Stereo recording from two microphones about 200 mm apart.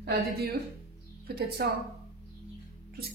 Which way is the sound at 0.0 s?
55° right (ahead or behind).